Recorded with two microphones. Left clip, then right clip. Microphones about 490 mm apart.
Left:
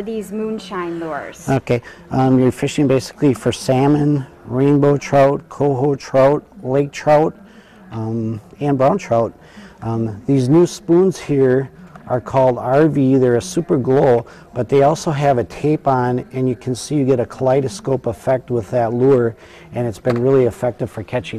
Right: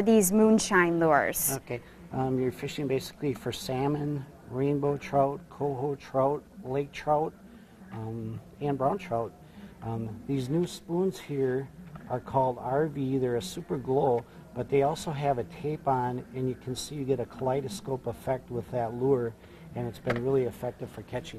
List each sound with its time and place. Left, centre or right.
0.0 s a woman's voice: right
1.6 s speech: left
8.5 s speech: left